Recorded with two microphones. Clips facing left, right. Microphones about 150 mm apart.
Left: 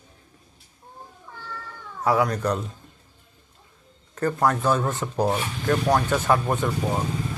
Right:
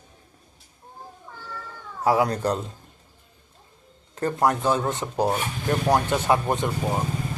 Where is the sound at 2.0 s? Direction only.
30° right (ahead or behind).